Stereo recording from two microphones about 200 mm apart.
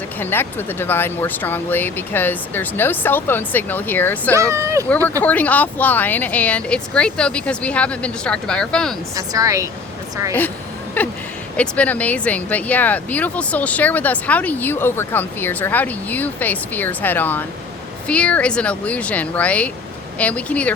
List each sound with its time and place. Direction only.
0.2 s speech: 10° left (ahead or behind)
4.4 s speech: 15° right (ahead or behind)
5.2 s speech: 5° left (ahead or behind)
9.1 s speech: 15° right (ahead or behind)
11.0 s speech: 10° left (ahead or behind)